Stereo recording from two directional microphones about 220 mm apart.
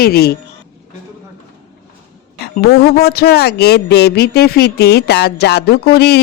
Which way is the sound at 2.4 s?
45° left (ahead or behind).